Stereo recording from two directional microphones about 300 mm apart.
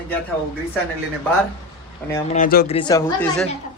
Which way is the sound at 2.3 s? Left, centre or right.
Left.